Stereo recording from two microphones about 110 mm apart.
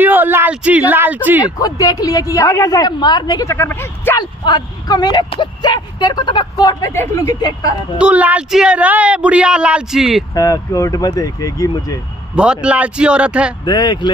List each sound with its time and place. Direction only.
0.0 s speech: 15° right (ahead or behind)
1.4 s speech: 35° left (ahead or behind)
3.5 s speech: 20° left (ahead or behind)
4.2 s speech: 40° left (ahead or behind)
6.9 s speech: 25° left (ahead or behind)
7.2 s speech: 35° left (ahead or behind)
8.0 s speech: 15° right (ahead or behind)
10.3 s speech: 30° left (ahead or behind)
12.4 s speech: 10° right (ahead or behind)
13.7 s speech: 40° left (ahead or behind)